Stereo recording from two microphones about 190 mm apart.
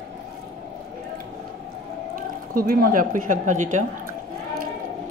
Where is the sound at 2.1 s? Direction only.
50° right (ahead or behind).